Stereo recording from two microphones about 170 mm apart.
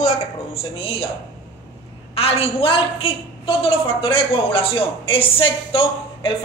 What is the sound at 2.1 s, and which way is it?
A woman's voice, 35° left (ahead or behind).